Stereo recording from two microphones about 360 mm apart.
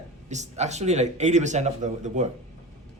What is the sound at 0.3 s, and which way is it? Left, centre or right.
A man's voice, centre.